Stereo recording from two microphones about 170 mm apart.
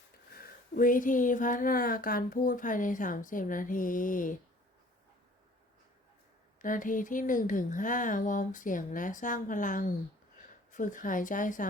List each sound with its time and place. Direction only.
0.3 s speech: 60° left (ahead or behind)
6.6 s speech: 50° left (ahead or behind)